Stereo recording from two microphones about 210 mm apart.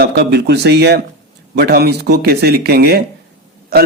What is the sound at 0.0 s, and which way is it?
A man's voice, 55° right (ahead or behind).